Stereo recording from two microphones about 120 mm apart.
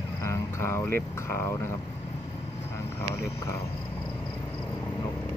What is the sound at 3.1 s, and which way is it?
Speech, 25° left (ahead or behind).